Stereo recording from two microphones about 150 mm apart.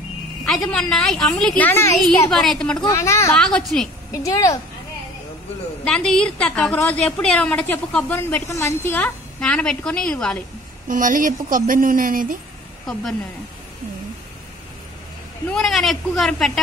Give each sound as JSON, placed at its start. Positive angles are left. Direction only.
{"t": 0.7, "sound": "a woman's voice", "side_deg": 5}
{"t": 2.3, "sound": "a woman's voice", "side_deg": 0}
{"t": 2.8, "sound": "a woman's voice", "side_deg": 20}
{"t": 3.3, "sound": "a woman's voice", "side_deg": 5}
{"t": 4.1, "sound": "a woman's voice", "side_deg": 25}
{"t": 5.9, "sound": "a woman's voice", "side_deg": 5}
{"t": 10.9, "sound": "speech", "side_deg": -60}
{"t": 15.5, "sound": "a woman's voice", "side_deg": 0}